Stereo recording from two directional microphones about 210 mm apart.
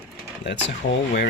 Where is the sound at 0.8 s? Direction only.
50° left (ahead or behind).